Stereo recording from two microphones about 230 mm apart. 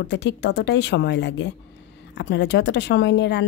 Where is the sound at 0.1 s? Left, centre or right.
Left.